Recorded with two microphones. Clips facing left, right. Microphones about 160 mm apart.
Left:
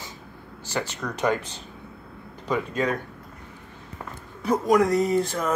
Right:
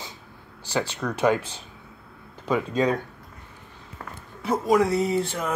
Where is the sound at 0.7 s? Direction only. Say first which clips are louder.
Right 3 dB; 10° right (ahead or behind).